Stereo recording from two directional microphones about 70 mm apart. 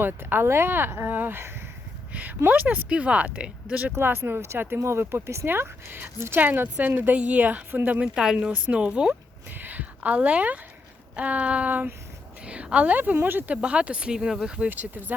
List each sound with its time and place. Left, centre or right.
0.0 s speech: right
2.5 s speech: right
3.9 s speech: right
8.1 s speech: centre
9.5 s speech: right
13.6 s speech: centre
14.7 s speech: right